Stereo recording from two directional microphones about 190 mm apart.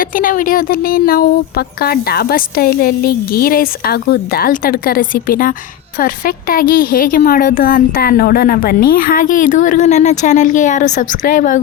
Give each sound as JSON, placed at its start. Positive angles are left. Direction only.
{"t": 0.0, "sound": "speech", "side_deg": 45}